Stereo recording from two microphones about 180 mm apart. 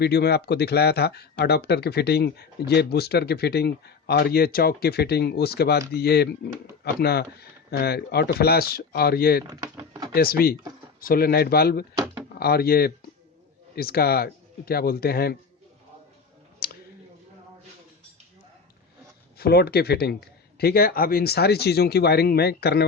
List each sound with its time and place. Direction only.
0.0 s speech: 65° left (ahead or behind)
9.5 s speech: 20° right (ahead or behind)
10.2 s speech: 55° left (ahead or behind)
16.6 s a sound: 60° left (ahead or behind)
19.4 s speech: 60° left (ahead or behind)